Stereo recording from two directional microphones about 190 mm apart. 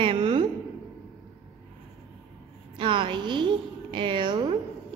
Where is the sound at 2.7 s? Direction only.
25° right (ahead or behind).